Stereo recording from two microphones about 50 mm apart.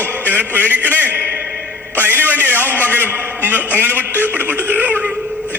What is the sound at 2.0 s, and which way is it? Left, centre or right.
A man's voice, right.